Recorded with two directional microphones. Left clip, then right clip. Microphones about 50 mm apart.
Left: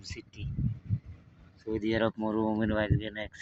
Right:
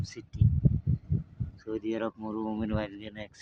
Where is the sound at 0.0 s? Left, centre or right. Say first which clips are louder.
Even; right.